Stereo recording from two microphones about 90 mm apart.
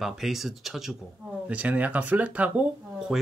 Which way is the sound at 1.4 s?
15° right (ahead or behind).